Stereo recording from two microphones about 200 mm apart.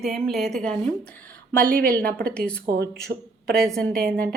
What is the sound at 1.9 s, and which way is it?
Speech, 5° left (ahead or behind).